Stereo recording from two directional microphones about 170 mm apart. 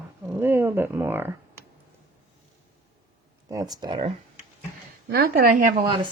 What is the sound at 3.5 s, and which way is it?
Speech, 20° right (ahead or behind).